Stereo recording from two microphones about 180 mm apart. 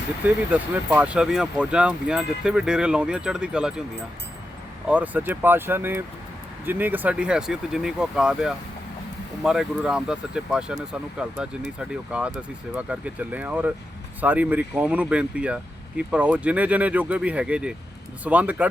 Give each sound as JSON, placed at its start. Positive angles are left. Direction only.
{"t": 0.5, "sound": "speech", "side_deg": -10}
{"t": 4.9, "sound": "speech", "side_deg": -10}